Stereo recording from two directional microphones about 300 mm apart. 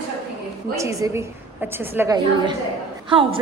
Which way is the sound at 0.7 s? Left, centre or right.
Centre.